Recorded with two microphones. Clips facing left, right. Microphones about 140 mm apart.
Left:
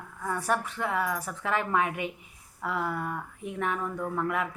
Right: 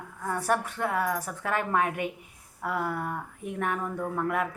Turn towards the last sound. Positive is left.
turn(degrees=-45)  # may be behind; listen again after turning